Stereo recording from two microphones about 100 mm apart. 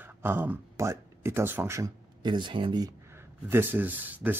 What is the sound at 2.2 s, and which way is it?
Speech, 50° right (ahead or behind).